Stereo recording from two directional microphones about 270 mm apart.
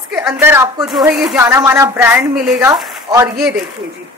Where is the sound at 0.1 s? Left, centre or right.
Centre.